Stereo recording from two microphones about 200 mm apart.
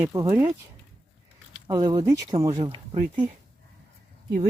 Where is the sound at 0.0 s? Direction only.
15° right (ahead or behind).